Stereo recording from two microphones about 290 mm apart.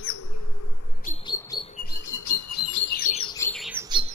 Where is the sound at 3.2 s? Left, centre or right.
Centre.